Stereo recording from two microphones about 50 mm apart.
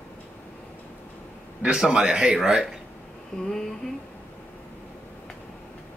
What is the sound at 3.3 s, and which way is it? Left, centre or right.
Humming, centre.